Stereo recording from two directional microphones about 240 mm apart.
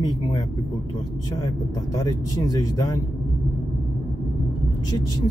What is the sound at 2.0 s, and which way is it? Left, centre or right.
Speech, centre.